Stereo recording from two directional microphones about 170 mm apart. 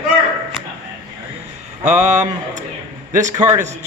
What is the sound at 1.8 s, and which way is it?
Speech, 45° right (ahead or behind).